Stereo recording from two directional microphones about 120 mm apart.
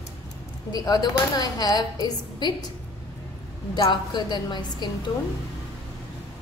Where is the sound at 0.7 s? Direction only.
35° left (ahead or behind).